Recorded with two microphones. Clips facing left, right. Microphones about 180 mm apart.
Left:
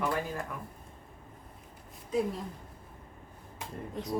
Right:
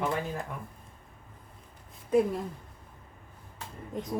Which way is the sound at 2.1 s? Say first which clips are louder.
Right 6 dB; 55° right (ahead or behind).